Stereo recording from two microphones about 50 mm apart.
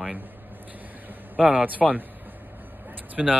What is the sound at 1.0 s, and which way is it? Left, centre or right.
Vehicle, right.